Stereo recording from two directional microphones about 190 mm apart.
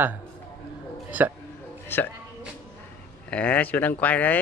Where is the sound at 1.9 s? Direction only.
10° left (ahead or behind).